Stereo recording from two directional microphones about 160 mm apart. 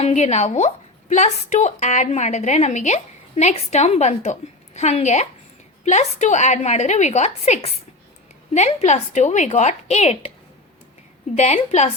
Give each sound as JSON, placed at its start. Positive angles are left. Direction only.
{"t": 0.0, "sound": "a woman's voice", "side_deg": 45}
{"t": 11.3, "sound": "a woman's voice", "side_deg": 45}